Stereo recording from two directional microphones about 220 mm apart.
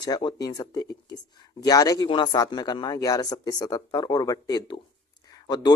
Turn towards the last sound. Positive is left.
turn(degrees=20)  # may be behind; listen again after turning